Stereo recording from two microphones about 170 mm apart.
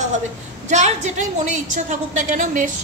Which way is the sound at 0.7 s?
45° right (ahead or behind).